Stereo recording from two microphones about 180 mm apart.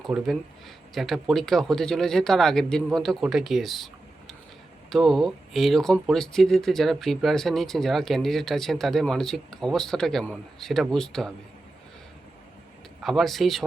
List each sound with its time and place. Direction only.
0.1 s speech: 5° right (ahead or behind)
4.9 s speech: centre (ahead or behind)
13.0 s speech: centre (ahead or behind)